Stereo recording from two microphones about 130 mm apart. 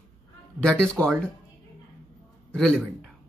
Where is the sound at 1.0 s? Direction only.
20° right (ahead or behind).